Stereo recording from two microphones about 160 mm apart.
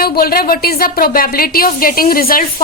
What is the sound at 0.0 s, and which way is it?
A woman's voice, 70° left (ahead or behind).